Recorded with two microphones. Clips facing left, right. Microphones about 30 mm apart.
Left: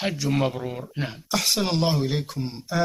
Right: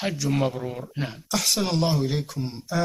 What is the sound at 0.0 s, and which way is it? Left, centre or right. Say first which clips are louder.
Speech: left 1 dB; centre.